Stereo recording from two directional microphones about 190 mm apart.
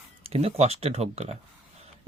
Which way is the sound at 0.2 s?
30° right (ahead or behind).